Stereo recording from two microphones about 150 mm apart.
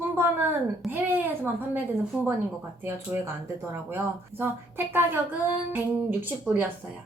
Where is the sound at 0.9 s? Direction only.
15° right (ahead or behind).